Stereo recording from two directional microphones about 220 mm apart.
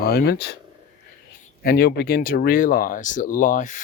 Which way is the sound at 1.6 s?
45° left (ahead or behind).